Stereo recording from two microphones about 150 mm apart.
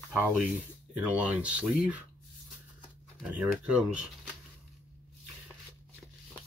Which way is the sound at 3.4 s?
10° right (ahead or behind).